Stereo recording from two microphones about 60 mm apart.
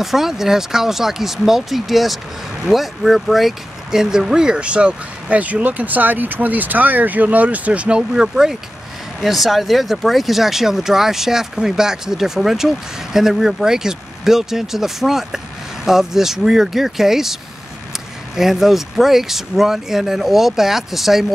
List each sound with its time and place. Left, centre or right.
0.0 s speech: centre; by 8.0 s right
8.1 s speech: centre